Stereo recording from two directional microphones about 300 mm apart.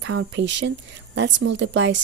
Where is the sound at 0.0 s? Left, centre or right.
Right.